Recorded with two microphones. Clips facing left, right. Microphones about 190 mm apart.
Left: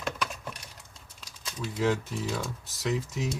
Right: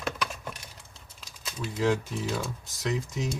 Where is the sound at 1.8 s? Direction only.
Centre (ahead or behind).